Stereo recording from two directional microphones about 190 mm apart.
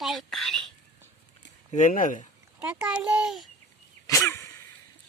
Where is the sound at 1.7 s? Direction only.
45° left (ahead or behind).